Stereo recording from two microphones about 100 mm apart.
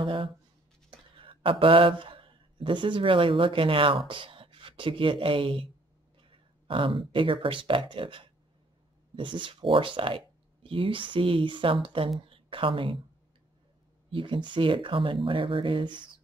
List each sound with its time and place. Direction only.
0.0 s a sound: 60° right (ahead or behind)
0.8 s a man's voice: 60° right (ahead or behind)
14.1 s speech: 55° right (ahead or behind)